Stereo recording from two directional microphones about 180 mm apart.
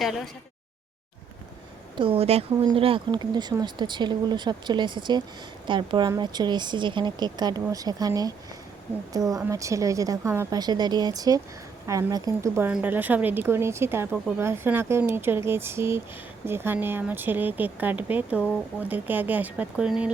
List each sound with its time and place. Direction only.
2.0 s speech: 30° right (ahead or behind); by 20.1 s 5° right (ahead or behind)